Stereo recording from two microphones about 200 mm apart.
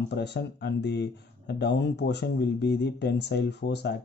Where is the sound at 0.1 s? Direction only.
55° left (ahead or behind).